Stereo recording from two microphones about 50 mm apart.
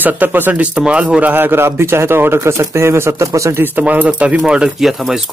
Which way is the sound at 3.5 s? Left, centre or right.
Right.